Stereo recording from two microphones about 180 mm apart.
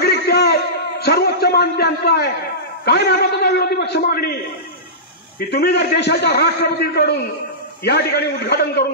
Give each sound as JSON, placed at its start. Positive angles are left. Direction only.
{"t": 0.0, "sound": "a sound", "side_deg": 65}
{"t": 2.8, "sound": "a man's voice", "side_deg": 65}
{"t": 5.5, "sound": "a man's voice", "side_deg": 65}